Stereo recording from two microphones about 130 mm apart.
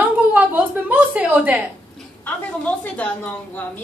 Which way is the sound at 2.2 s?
10° left (ahead or behind).